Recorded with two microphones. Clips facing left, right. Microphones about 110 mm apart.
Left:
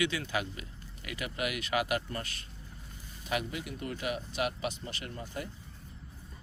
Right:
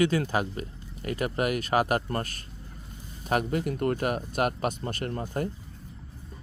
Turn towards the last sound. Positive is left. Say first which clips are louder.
# right 9 dB
turn(degrees=-50)  # may be behind; listen again after turning